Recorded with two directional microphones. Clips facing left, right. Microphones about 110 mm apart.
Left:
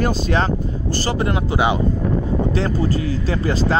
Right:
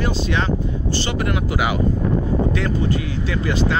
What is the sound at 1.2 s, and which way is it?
Speech, 30° left (ahead or behind).